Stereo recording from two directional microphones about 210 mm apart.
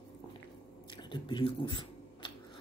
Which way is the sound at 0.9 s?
20° left (ahead or behind).